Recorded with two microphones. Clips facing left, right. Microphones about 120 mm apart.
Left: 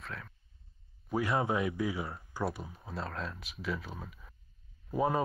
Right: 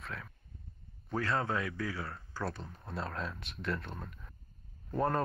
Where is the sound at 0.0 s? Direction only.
Centre (ahead or behind).